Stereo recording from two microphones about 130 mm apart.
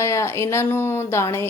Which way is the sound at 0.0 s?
20° left (ahead or behind).